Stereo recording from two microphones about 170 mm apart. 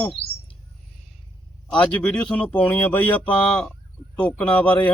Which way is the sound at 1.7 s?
10° left (ahead or behind).